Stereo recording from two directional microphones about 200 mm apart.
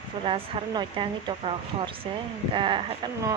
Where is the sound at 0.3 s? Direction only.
25° right (ahead or behind).